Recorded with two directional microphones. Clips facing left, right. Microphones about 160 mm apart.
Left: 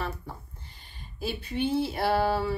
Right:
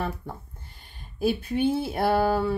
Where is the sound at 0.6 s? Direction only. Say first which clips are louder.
Right 1 dB; 50° right (ahead or behind).